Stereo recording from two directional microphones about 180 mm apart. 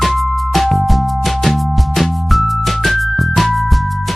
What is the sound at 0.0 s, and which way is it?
Music, centre (ahead or behind).